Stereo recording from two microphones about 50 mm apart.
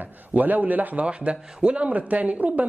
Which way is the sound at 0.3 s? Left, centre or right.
Right.